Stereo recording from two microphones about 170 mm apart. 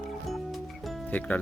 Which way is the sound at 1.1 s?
10° left (ahead or behind).